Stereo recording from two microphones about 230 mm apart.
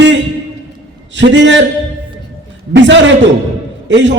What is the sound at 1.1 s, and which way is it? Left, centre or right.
Speech, right.